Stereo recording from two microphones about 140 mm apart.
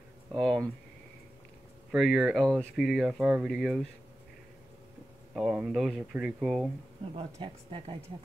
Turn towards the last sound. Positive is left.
turn(degrees=-40)  # may be behind; listen again after turning